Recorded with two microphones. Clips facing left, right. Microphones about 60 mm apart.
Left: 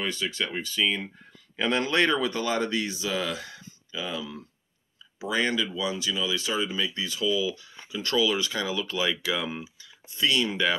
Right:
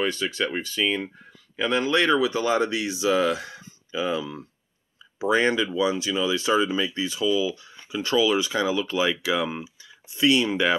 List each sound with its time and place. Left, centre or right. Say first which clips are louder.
0.0 s speech: right 5 dB; right
1.6 s speech: right 2 dB; centre; by 6.9 s right
6.9 s speech: right 3 dB; centre